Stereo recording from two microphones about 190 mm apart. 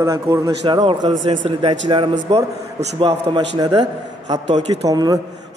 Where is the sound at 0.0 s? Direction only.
20° right (ahead or behind).